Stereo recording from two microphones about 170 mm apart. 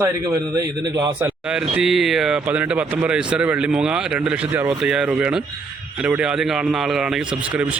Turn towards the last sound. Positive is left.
turn(degrees=-10)  # may be behind; listen again after turning